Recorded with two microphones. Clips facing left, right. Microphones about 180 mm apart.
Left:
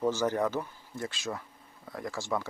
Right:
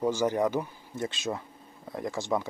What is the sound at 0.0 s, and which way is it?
Speech, 15° right (ahead or behind).